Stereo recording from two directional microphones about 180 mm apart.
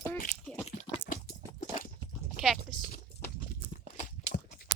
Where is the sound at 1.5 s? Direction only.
45° left (ahead or behind).